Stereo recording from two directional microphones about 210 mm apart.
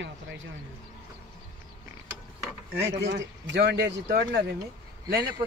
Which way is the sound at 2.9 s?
55° right (ahead or behind).